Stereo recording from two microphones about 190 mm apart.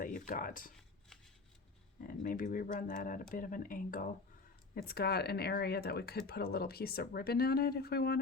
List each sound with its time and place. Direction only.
0.0 s speech: 45° left (ahead or behind)
2.0 s speech: 45° left (ahead or behind)